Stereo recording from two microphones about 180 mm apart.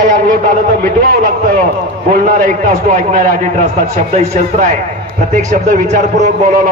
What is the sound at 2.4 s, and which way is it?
A man's voice, 45° right (ahead or behind).